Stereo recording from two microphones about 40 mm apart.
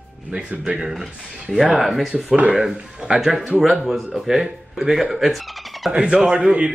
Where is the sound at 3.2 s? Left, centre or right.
Centre.